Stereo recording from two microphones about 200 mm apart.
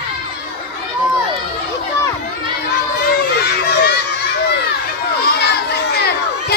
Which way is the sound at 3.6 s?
55° left (ahead or behind).